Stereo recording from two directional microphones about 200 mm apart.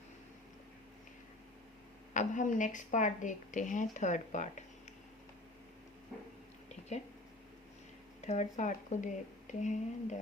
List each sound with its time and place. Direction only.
2.1 s a woman's voice: 40° left (ahead or behind)
8.2 s a woman's voice: 35° left (ahead or behind)